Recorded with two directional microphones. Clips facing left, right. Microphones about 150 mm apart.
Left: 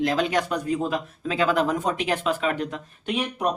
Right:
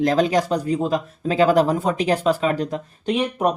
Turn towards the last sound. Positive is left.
turn(degrees=-35)  # may be behind; listen again after turning